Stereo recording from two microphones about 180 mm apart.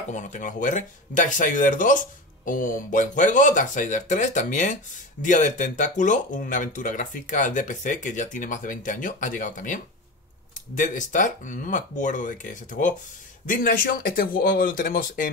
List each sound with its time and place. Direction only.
0.1 s speech: 45° left (ahead or behind)